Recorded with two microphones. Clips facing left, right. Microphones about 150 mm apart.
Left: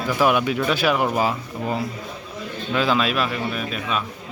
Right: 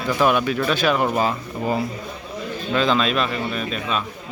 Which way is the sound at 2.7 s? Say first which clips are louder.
Right 1 dB; 10° left (ahead or behind).